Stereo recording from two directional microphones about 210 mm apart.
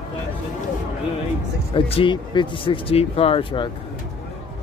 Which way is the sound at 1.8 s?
25° left (ahead or behind).